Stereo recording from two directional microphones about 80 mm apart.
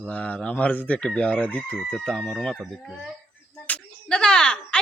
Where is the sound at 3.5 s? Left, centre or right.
Centre.